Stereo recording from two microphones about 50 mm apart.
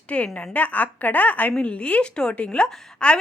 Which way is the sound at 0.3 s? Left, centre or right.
Left.